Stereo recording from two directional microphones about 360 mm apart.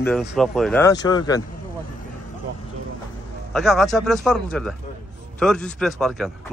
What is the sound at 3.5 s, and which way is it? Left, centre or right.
Speech, centre.